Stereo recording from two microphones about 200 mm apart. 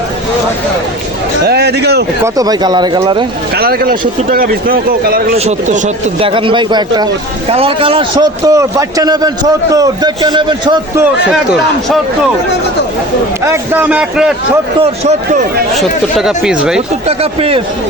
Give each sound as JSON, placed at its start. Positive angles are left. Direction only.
{"t": 1.5, "sound": "a man's voice", "side_deg": -55}
{"t": 2.2, "sound": "a man's voice", "side_deg": -20}
{"t": 3.5, "sound": "a man's voice", "side_deg": -50}
{"t": 11.0, "sound": "speech", "side_deg": 0}
{"t": 13.4, "sound": "speech", "side_deg": -10}
{"t": 14.8, "sound": "a man's voice", "side_deg": -35}
{"t": 15.7, "sound": "speech", "side_deg": 0}
{"t": 17.1, "sound": "a man's voice", "side_deg": -30}